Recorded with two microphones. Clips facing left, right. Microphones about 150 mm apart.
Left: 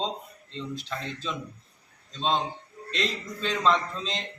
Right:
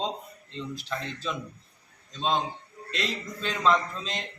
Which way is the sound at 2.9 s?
5° right (ahead or behind).